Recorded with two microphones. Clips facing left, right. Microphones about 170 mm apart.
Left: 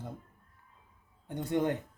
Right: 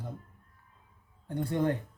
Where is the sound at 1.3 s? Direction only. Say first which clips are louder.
Right 1 dB; 20° left (ahead or behind).